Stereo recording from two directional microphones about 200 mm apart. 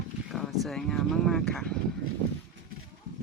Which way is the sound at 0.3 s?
Centre (ahead or behind).